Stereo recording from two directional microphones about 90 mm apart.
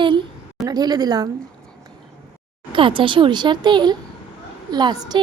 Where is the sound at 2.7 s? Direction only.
70° right (ahead or behind); by 5.2 s 50° right (ahead or behind).